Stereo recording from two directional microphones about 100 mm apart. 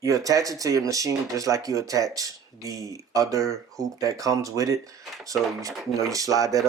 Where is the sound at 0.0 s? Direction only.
35° right (ahead or behind).